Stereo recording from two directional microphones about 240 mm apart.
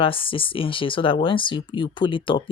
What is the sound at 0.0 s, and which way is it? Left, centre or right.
Speech, left.